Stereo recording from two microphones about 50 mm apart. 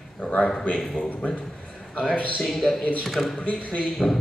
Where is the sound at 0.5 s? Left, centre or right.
Centre.